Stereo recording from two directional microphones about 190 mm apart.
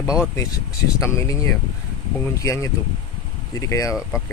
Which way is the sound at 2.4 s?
15° left (ahead or behind).